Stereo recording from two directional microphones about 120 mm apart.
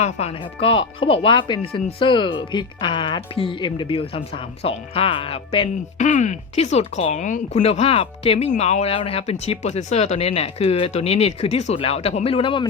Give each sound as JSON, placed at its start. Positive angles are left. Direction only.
{"t": 0.0, "sound": "speech", "side_deg": 60}
{"t": 6.0, "sound": "speech", "side_deg": 90}
{"t": 7.6, "sound": "speech", "side_deg": 55}